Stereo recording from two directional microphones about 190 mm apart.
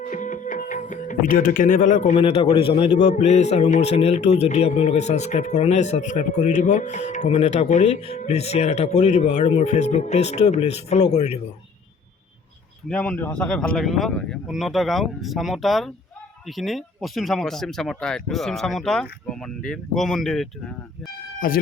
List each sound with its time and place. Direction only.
0.1 s music: 40° left (ahead or behind)
2.1 s a man's voice: 30° left (ahead or behind)
12.9 s speech: 5° left (ahead or behind)
21.4 s speech: 45° left (ahead or behind)